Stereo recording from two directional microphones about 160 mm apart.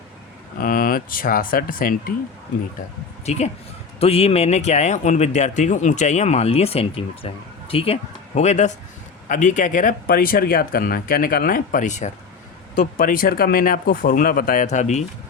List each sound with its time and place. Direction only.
0.6 s speech: 65° left (ahead or behind)
3.2 s a man's voice: 40° left (ahead or behind)
8.4 s a man's voice: 45° left (ahead or behind)